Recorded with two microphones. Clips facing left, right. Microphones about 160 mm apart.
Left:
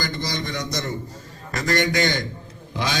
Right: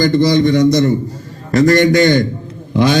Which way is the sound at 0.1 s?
65° right (ahead or behind).